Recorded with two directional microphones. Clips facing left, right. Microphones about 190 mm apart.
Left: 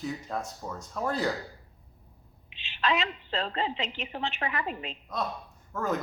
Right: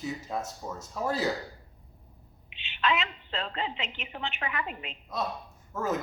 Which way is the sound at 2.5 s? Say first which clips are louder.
Even; 35° left (ahead or behind).